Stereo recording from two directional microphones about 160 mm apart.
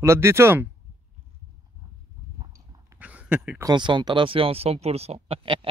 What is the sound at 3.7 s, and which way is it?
Speech, 30° right (ahead or behind).